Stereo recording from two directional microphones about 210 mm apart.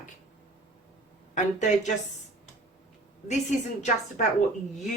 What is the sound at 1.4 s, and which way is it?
Speech, 35° left (ahead or behind).